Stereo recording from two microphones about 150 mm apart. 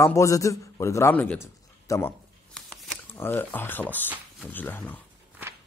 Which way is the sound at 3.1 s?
15° left (ahead or behind).